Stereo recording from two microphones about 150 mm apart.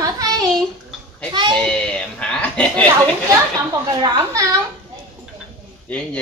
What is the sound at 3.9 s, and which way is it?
Speech, 25° right (ahead or behind).